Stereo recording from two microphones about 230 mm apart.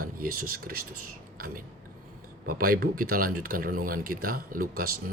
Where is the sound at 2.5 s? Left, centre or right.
Right.